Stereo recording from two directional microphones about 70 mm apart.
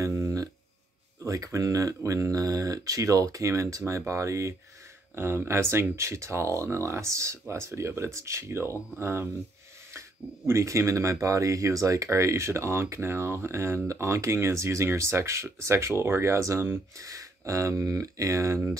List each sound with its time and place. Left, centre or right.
0.0 s music: right
1.2 s speech: right
5.1 s speech: right